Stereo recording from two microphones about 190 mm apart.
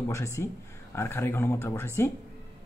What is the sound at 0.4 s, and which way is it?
Speech, 15° left (ahead or behind).